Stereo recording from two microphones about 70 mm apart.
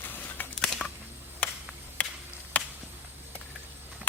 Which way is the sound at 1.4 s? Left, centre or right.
Left.